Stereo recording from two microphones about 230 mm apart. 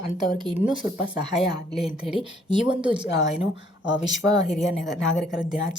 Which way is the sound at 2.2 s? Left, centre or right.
Right.